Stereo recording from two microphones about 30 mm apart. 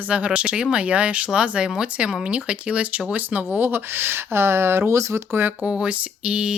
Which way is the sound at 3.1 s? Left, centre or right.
Right.